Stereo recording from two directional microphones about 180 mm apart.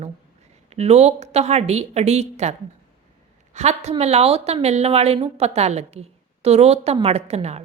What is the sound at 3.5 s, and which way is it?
A woman's voice, 35° right (ahead or behind).